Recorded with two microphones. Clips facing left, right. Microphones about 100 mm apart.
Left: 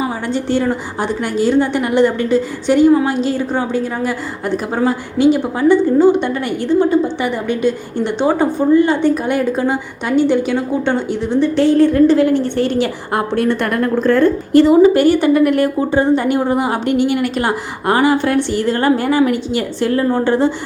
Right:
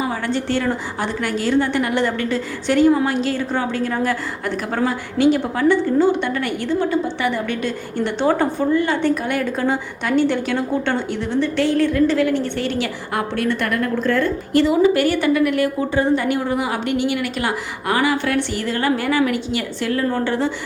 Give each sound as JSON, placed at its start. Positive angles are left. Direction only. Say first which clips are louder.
{"t": 0.0, "sound": "a woman's voice", "louder": "left 3 dB", "side_deg": 15}